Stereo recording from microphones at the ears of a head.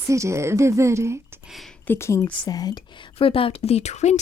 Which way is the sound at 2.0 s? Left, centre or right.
Left.